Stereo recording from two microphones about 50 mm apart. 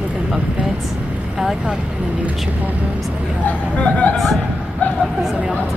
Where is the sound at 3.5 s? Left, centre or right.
Left.